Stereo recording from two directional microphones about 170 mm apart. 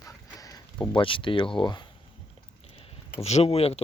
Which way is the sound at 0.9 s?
30° left (ahead or behind).